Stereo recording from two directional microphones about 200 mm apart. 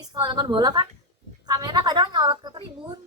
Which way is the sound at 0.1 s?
20° right (ahead or behind).